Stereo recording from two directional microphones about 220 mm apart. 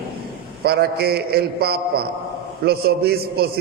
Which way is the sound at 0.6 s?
45° right (ahead or behind).